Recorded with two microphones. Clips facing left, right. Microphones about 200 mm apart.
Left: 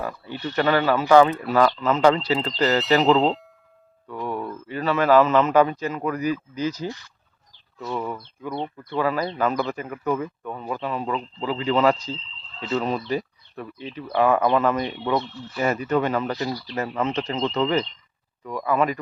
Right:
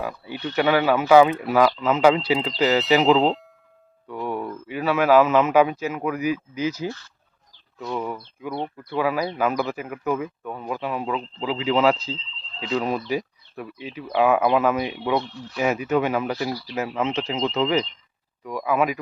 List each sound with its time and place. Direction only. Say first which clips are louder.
0.0 s a man's voice: even; 10° right (ahead or behind)
2.6 s speech: right 1 dB; centre (ahead or behind)
4.1 s a man's voice: right 1 dB; 10° right (ahead or behind)
6.8 s speech: right 1 dB; 15° left (ahead or behind)
7.8 s a man's voice: even; centre (ahead or behind)